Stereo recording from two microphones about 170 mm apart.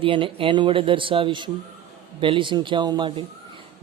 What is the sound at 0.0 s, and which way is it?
A man's voice, 30° right (ahead or behind).